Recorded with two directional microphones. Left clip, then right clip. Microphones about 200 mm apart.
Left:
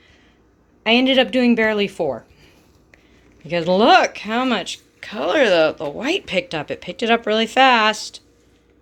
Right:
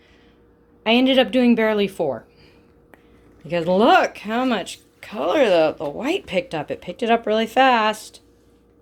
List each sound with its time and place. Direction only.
0.9 s speech: 5° right (ahead or behind)